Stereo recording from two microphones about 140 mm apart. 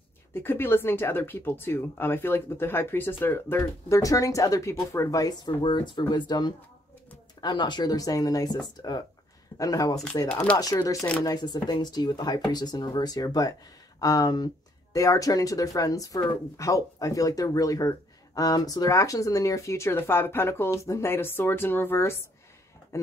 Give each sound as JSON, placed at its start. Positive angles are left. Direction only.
{"t": 0.3, "sound": "speech", "side_deg": 15}
{"t": 10.2, "sound": "speech", "side_deg": 10}
{"t": 10.6, "sound": "speech", "side_deg": 25}